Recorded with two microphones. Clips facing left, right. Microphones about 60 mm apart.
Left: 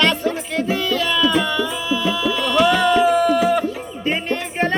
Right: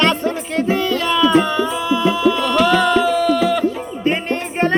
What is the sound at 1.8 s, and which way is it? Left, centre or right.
Music, right.